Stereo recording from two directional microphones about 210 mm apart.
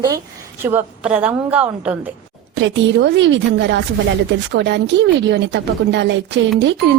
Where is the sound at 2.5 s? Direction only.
60° right (ahead or behind).